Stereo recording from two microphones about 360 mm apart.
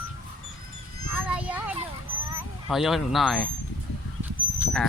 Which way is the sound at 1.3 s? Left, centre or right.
Centre.